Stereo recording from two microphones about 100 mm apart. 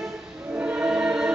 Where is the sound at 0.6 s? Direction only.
10° right (ahead or behind).